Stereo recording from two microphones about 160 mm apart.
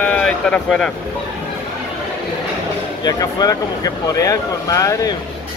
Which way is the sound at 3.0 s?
25° left (ahead or behind).